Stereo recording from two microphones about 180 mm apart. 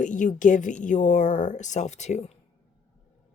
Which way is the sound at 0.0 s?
45° left (ahead or behind).